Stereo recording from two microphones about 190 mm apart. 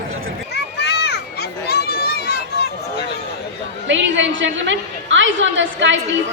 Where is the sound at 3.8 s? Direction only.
75° right (ahead or behind).